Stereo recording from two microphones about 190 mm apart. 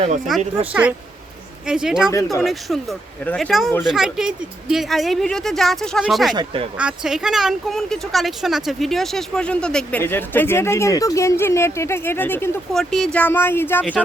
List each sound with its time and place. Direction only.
0.3 s speech: centre (ahead or behind)
6.3 s speech: 25° right (ahead or behind)
6.7 s speech: 5° right (ahead or behind); by 13.8 s 10° left (ahead or behind)